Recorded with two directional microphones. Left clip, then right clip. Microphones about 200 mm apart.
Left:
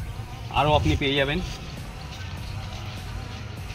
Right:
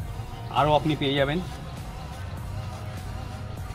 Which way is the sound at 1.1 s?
20° right (ahead or behind).